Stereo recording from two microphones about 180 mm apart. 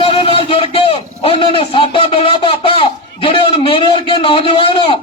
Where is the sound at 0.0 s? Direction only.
30° left (ahead or behind).